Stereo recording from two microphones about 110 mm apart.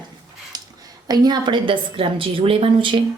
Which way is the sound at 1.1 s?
40° right (ahead or behind).